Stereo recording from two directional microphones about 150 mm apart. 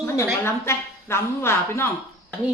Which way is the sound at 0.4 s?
15° left (ahead or behind).